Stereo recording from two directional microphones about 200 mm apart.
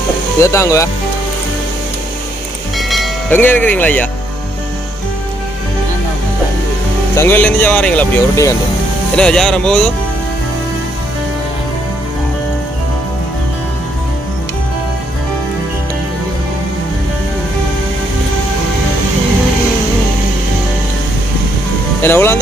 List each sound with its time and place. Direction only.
0.4 s speech: 15° left (ahead or behind)
2.9 s train: 5° left (ahead or behind)
7.2 s speech: 10° left (ahead or behind)
22.0 s speech: 10° left (ahead or behind)